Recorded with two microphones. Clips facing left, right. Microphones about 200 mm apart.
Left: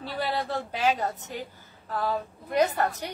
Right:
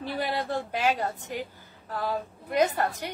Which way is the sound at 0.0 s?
15° right (ahead or behind).